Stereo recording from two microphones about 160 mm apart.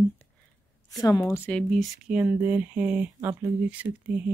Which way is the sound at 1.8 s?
5° right (ahead or behind).